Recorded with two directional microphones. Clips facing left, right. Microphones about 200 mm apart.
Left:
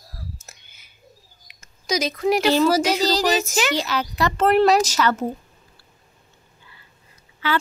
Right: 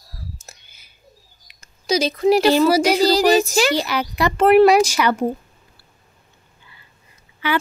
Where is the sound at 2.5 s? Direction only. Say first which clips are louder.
Right 3 dB; 10° right (ahead or behind).